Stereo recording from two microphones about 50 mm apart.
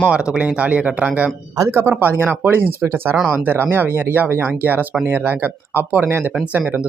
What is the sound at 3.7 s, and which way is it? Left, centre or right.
Speech, right.